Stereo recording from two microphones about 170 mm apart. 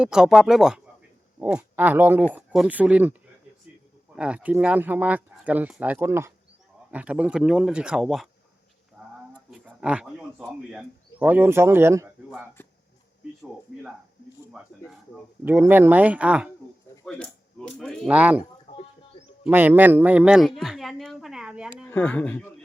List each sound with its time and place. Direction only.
0.0 s speech: 5° right (ahead or behind)
9.0 s a sound: 5° right (ahead or behind)
9.5 s speech: 5° right (ahead or behind)
12.6 s a sound: 10° left (ahead or behind)
14.5 s speech: centre (ahead or behind)
15.4 s speech: 10° right (ahead or behind)
17.1 s speech: 5° left (ahead or behind)
18.1 s speech: 10° right (ahead or behind)
18.7 s a sound: 40° left (ahead or behind)
19.5 s speech: 10° right (ahead or behind)
21.8 s speech: 10° left (ahead or behind)